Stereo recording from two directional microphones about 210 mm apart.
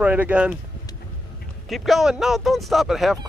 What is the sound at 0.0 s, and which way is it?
Speech, 5° right (ahead or behind).